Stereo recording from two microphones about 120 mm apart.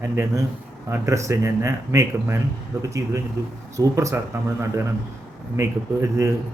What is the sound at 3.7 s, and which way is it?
Speech, 25° right (ahead or behind).